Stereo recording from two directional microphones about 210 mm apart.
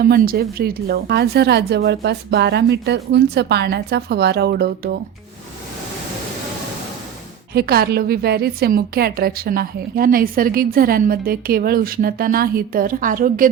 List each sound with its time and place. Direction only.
0.0 s a woman's voice: 45° right (ahead or behind)
7.5 s a woman's voice: 50° right (ahead or behind)